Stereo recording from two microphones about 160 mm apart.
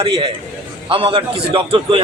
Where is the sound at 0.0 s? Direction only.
30° right (ahead or behind).